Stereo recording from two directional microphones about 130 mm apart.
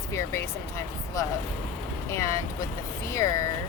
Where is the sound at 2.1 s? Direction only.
25° left (ahead or behind).